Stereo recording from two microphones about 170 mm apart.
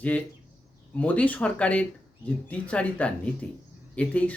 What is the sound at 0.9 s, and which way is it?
Speech, 10° left (ahead or behind).